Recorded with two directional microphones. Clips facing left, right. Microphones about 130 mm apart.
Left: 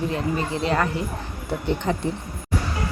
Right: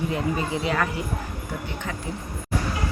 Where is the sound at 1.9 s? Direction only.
30° left (ahead or behind).